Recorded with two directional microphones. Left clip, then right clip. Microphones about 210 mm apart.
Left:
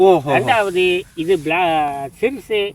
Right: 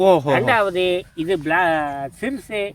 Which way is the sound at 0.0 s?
40° right (ahead or behind).